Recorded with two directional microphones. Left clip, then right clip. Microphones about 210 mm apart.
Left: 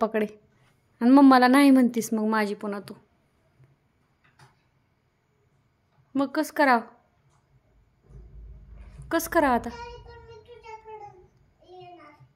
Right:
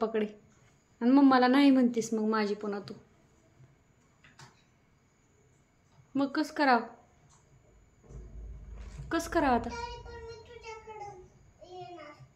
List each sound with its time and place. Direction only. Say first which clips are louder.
0.0 s a woman's voice: left 5 dB; 40° left (ahead or behind)
6.1 s a woman's voice: left 6 dB; 35° left (ahead or behind)
9.1 s a woman's voice: left 5 dB; 35° left (ahead or behind)